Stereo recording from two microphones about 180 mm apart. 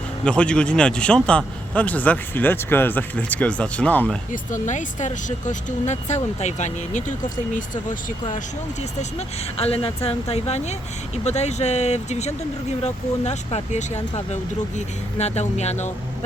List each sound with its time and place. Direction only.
0.3 s a man's voice: 5° left (ahead or behind)
4.3 s speech: 45° left (ahead or behind)
9.0 s speech: 35° left (ahead or behind)